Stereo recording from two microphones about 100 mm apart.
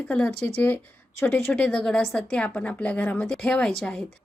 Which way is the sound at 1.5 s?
10° left (ahead or behind).